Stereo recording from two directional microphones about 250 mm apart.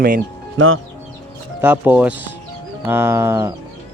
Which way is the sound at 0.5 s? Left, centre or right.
Right.